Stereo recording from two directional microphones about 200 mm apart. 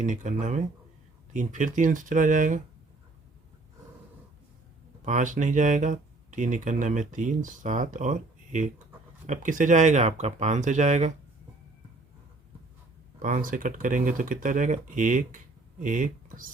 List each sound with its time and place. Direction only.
0.0 s speech: 40° right (ahead or behind)
5.0 s speech: 40° right (ahead or behind)
13.1 s speech: 40° right (ahead or behind)